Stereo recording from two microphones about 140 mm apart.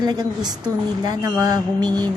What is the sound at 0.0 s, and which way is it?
Speech, 30° right (ahead or behind).